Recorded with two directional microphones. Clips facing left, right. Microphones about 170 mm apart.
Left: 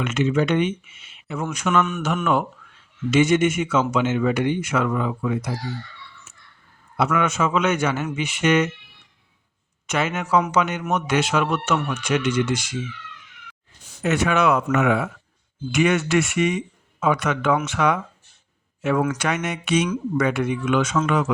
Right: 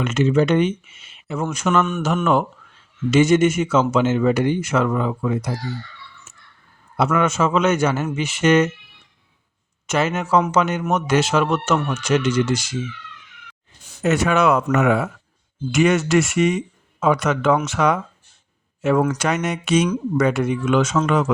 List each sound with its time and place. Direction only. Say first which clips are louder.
0.0 s speech: right 3 dB; 40° right (ahead or behind)
6.9 s speech: right 3 dB; 40° right (ahead or behind)
9.9 s speech: right 3 dB; 40° right (ahead or behind)
14.0 s speech: right 2 dB; 40° right (ahead or behind)